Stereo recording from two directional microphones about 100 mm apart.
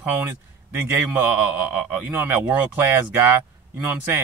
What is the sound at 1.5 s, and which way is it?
Speech, 15° right (ahead or behind).